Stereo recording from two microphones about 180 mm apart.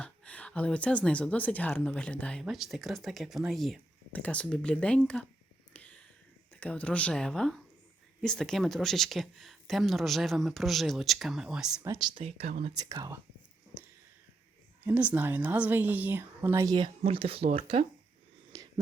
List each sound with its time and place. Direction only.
0.0 s speech: 5° left (ahead or behind)
5.7 s a sound: 5° left (ahead or behind)
6.5 s speech: 10° left (ahead or behind)
11.9 s speech: 25° right (ahead or behind)
12.1 s speech: 35° right (ahead or behind)
12.7 s speech: 20° right (ahead or behind)
14.8 s speech: 10° right (ahead or behind); by 17.8 s 35° right (ahead or behind)